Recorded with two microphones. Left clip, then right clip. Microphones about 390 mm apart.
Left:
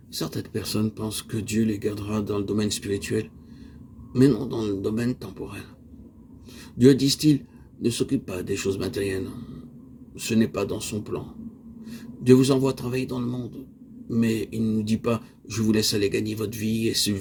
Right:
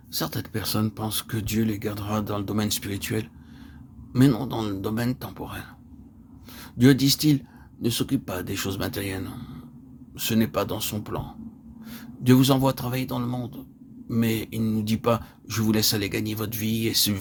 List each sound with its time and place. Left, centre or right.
0.1 s speech: right
6.7 s speech: right